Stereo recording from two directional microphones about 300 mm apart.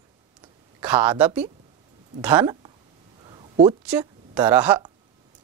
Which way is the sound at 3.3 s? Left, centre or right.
Centre.